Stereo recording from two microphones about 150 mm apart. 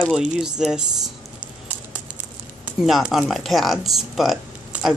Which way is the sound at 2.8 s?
Centre (ahead or behind).